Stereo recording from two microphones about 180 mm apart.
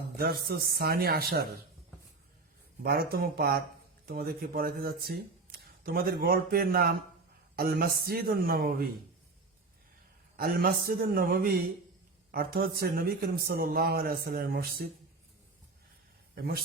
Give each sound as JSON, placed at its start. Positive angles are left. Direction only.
{"t": 0.2, "sound": "a man's voice", "side_deg": -60}
{"t": 2.8, "sound": "a man's voice", "side_deg": -60}
{"t": 10.3, "sound": "a man's voice", "side_deg": -55}
{"t": 16.3, "sound": "speech", "side_deg": -60}